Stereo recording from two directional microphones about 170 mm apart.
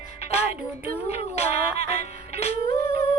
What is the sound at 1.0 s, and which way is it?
Music, 40° left (ahead or behind).